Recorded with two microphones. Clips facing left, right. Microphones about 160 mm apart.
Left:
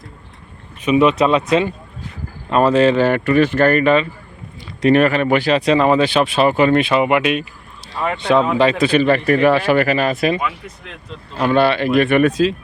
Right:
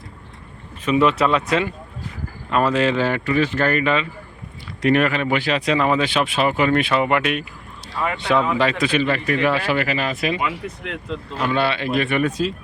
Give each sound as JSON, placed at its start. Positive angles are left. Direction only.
{"t": 0.9, "sound": "speech", "side_deg": 15}
{"t": 2.9, "sound": "speech", "side_deg": 50}
{"t": 4.8, "sound": "speech", "side_deg": 30}
{"t": 8.7, "sound": "speech", "side_deg": 35}
{"t": 11.3, "sound": "speech", "side_deg": 40}
{"t": 12.2, "sound": "speech", "side_deg": 90}